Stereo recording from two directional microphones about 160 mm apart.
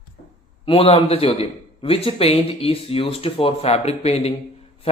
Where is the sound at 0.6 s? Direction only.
35° left (ahead or behind).